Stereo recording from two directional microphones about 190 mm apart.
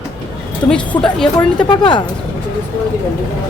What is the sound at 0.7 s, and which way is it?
Speech, 5° left (ahead or behind).